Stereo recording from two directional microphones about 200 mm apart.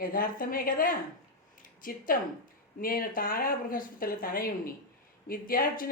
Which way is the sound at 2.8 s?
45° left (ahead or behind).